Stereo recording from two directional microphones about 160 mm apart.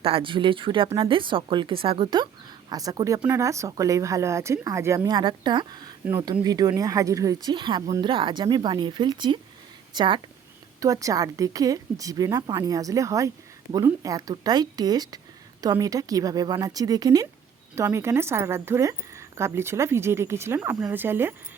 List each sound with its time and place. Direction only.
0.0 s a woman's voice: 35° right (ahead or behind); by 21.3 s 15° right (ahead or behind)